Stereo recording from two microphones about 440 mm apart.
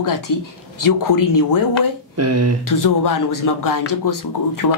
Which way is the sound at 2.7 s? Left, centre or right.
Left.